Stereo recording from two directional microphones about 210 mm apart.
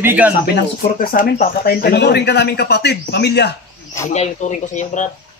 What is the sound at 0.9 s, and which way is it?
Speech, 45° left (ahead or behind).